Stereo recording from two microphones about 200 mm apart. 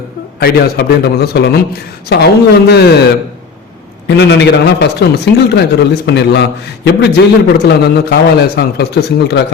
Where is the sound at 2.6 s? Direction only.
55° left (ahead or behind).